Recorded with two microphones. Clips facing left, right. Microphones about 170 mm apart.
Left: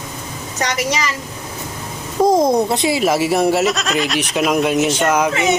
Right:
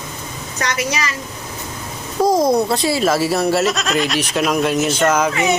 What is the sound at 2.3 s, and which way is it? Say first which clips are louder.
A child's voice: left 1 dB; 25° left (ahead or behind).